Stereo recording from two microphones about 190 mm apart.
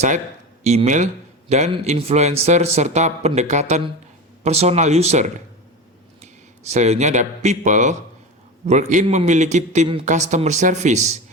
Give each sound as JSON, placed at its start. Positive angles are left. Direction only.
{"t": 0.6, "sound": "a man's voice", "side_deg": -35}
{"t": 6.7, "sound": "a man's voice", "side_deg": -35}